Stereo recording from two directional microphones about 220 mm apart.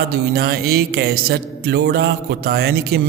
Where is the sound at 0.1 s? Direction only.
45° right (ahead or behind).